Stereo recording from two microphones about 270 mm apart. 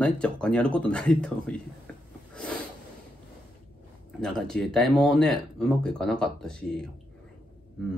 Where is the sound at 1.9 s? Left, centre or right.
Centre.